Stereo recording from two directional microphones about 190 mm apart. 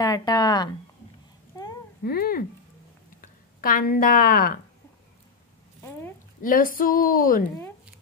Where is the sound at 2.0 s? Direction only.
50° left (ahead or behind).